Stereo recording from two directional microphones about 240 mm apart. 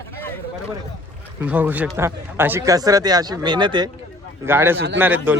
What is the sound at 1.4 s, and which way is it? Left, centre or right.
A man's voice, centre.